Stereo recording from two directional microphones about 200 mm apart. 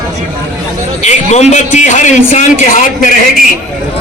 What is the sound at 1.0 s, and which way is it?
A man's voice, 35° left (ahead or behind).